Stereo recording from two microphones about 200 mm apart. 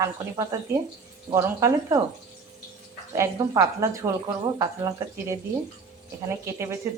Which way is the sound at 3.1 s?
15° right (ahead or behind).